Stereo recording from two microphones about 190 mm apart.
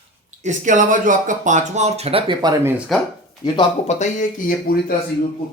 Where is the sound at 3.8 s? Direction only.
40° left (ahead or behind).